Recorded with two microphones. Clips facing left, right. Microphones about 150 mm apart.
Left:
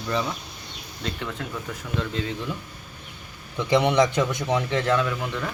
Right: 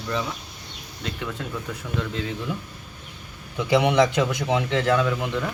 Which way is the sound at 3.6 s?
10° right (ahead or behind).